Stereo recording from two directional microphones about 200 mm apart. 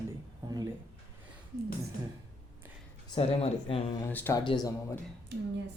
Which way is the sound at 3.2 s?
30° left (ahead or behind).